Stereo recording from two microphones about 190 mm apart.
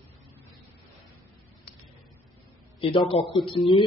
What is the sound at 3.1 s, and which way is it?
Speech, 30° left (ahead or behind).